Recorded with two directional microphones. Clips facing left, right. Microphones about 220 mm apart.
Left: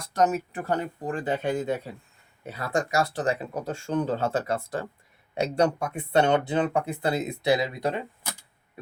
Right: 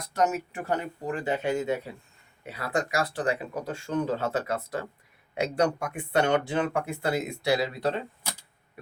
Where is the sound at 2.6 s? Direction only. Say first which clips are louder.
Left 2 dB; 45° left (ahead or behind).